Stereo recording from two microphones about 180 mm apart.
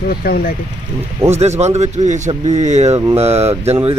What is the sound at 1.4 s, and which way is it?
A man's voice, 40° right (ahead or behind).